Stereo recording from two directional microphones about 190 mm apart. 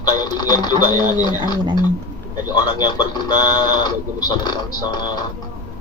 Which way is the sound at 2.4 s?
20° left (ahead or behind).